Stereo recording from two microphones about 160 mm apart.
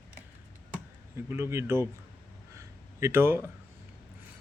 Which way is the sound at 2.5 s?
15° right (ahead or behind).